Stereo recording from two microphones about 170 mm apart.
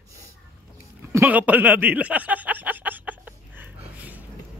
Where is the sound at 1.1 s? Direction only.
10° right (ahead or behind).